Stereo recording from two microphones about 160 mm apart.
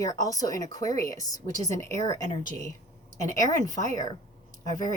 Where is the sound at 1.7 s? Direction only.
20° left (ahead or behind).